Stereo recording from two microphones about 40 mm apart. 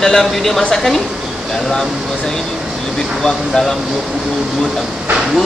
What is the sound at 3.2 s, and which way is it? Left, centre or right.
Speech, centre.